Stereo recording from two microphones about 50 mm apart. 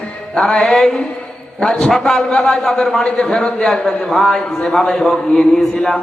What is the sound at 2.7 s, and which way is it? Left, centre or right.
A man's voice, centre.